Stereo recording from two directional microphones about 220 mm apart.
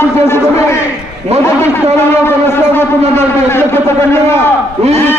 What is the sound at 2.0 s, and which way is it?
A man's voice, 10° left (ahead or behind).